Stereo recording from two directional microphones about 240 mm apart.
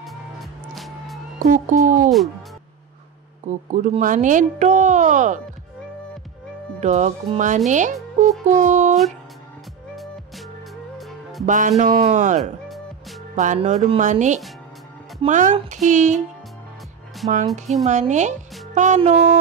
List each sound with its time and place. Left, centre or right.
0.0 s music: centre
1.5 s speech: right
2.0 s speech: centre
3.4 s speech: right
6.8 s speech: right
8.5 s a sound: right
11.0 s music: centre
11.4 s speech: right
17.8 s speech: right